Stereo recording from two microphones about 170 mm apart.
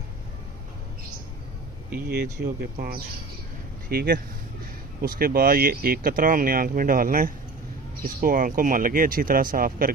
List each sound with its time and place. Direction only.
2.0 s speech: 65° right (ahead or behind)